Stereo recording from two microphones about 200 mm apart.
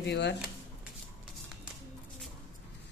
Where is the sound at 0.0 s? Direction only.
60° left (ahead or behind).